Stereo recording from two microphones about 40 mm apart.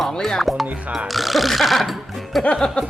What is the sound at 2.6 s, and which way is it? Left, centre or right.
Music, centre.